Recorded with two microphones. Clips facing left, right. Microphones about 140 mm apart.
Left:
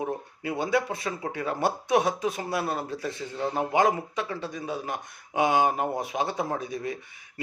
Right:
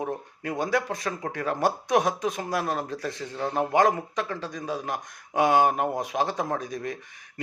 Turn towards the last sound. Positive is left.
turn(degrees=5)  # may be behind; listen again after turning